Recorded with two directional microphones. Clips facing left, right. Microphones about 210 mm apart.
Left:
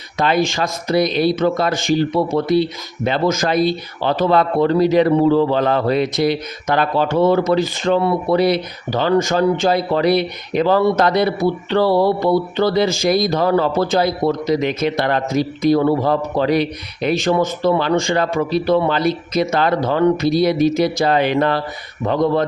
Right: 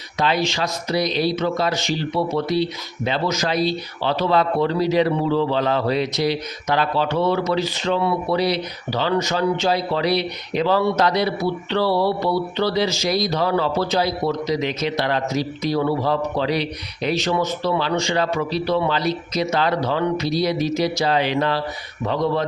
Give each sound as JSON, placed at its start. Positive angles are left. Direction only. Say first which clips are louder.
{"t": 0.2, "sound": "speech", "louder": "left 4 dB", "side_deg": 50}